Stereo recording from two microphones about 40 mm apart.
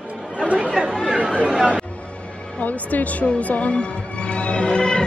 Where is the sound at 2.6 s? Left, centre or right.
Left.